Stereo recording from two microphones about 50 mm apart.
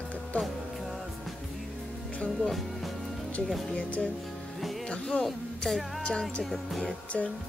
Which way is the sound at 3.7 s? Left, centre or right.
Left.